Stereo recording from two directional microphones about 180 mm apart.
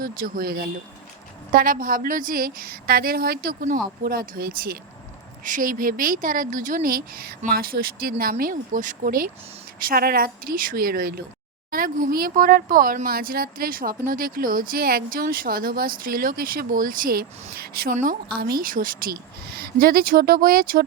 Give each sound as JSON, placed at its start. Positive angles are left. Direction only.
{"t": 0.0, "sound": "a woman's voice", "side_deg": -55}
{"t": 5.5, "sound": "a woman's voice", "side_deg": -50}
{"t": 18.3, "sound": "speech", "side_deg": -60}